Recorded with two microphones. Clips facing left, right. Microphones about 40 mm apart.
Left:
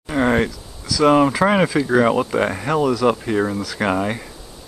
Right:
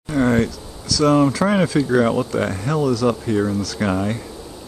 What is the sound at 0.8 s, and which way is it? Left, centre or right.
Speech, centre.